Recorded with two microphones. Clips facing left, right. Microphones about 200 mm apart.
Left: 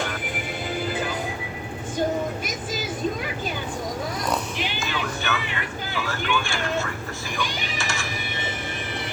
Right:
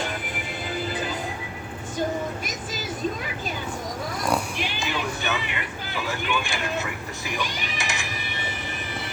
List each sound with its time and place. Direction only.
4.8 s vehicle: 15° right (ahead or behind)
7.8 s typing: 15° right (ahead or behind)